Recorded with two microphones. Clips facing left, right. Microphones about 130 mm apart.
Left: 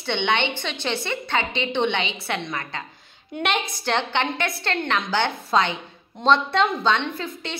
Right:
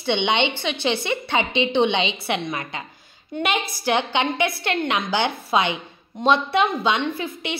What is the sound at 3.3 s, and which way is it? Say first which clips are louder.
A woman's voice: right 1 dB; 5° right (ahead or behind).